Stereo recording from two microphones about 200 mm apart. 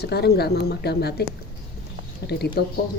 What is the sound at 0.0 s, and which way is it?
Speech, 55° left (ahead or behind).